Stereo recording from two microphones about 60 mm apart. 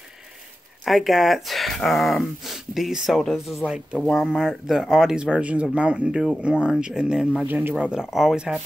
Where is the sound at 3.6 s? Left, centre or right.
Centre.